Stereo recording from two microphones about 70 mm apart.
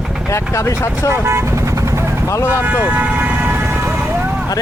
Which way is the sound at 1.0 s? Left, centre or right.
Right.